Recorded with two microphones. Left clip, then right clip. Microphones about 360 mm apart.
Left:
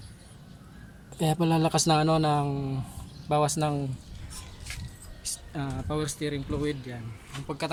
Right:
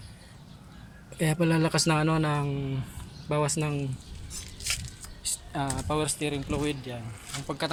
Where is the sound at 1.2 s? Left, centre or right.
Centre.